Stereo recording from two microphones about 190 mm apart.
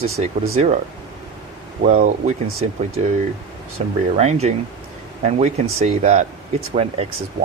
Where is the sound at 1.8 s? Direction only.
40° right (ahead or behind).